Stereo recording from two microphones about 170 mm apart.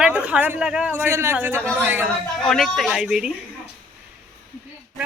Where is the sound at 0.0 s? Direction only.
10° right (ahead or behind).